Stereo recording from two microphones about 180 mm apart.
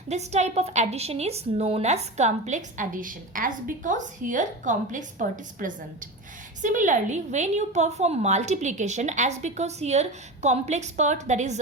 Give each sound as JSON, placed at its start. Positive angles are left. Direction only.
{"t": 0.1, "sound": "a woman's voice", "side_deg": -40}